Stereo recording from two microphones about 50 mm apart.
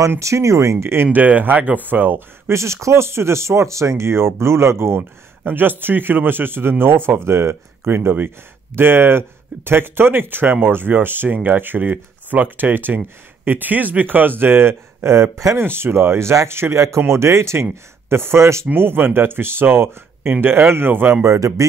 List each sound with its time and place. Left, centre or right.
0.2 s speech: right
1.0 s speech: right
2.5 s speech: right
15.3 s speech: right
15.6 s speech: right
18.1 s speech: right
18.4 s speech: right
18.7 s speech: right
21.2 s speech: right